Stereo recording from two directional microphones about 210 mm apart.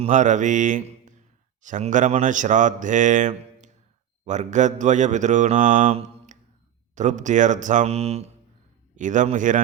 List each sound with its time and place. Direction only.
0.0 s speech: 35° right (ahead or behind)